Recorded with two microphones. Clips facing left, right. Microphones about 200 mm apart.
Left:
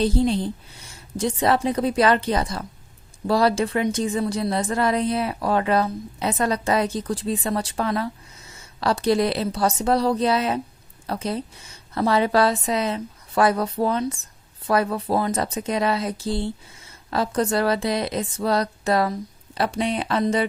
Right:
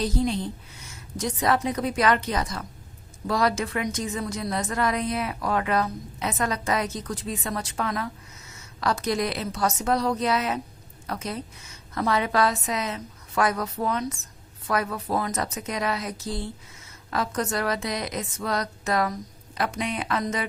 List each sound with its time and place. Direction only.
0.0 s a woman's voice: 30° left (ahead or behind)